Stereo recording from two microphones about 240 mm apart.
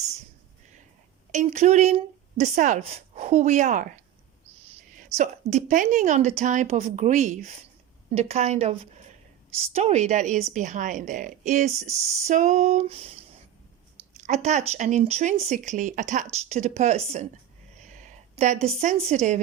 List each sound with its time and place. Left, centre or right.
1.3 s speech: right
17.8 s a sound: right
19.0 s speech: right